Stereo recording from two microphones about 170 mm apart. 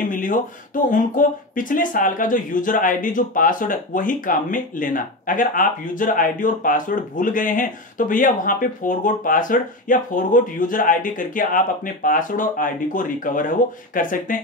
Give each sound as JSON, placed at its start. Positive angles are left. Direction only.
{"t": 0.1, "sound": "speech", "side_deg": 50}